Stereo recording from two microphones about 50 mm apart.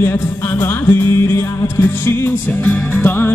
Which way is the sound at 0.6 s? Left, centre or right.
Left.